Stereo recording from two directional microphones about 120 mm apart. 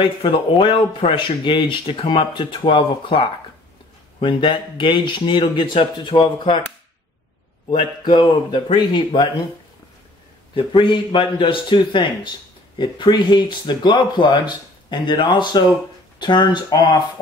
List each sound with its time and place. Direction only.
0.2 s speech: 45° left (ahead or behind)
8.0 s speech: 40° left (ahead or behind)
10.5 s speech: 45° left (ahead or behind)